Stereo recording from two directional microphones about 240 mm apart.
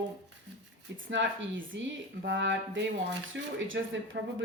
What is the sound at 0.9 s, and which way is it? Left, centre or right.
Speech, right.